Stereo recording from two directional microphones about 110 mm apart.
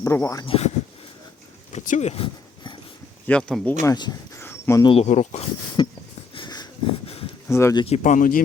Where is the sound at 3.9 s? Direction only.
40° left (ahead or behind).